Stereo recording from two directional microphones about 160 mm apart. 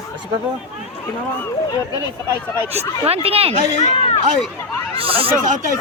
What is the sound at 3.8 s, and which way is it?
Speech, 45° left (ahead or behind).